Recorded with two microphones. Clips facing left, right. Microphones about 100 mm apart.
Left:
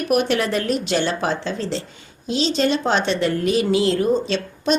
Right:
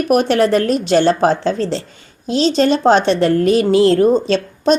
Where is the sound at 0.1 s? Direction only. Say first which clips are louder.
Right 6 dB; 40° right (ahead or behind).